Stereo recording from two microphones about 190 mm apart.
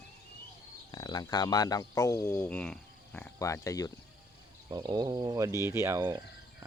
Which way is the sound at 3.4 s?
15° left (ahead or behind).